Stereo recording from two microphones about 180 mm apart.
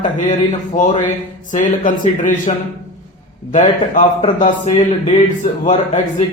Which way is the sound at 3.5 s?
40° left (ahead or behind).